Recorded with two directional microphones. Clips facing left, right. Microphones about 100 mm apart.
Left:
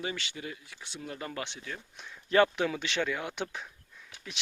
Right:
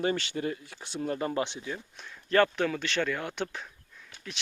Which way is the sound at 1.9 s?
5° left (ahead or behind).